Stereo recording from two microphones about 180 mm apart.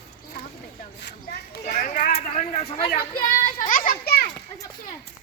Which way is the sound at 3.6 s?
50° left (ahead or behind).